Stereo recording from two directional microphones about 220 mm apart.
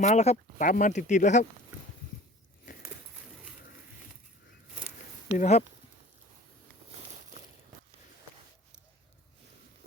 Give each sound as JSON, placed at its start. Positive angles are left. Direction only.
{"t": 0.0, "sound": "speech", "side_deg": 30}
{"t": 5.3, "sound": "speech", "side_deg": 30}